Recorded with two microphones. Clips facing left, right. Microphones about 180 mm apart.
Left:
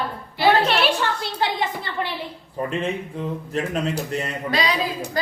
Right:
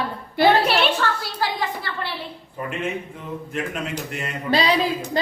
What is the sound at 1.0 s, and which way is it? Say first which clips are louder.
A woman's voice: even; 20° left (ahead or behind).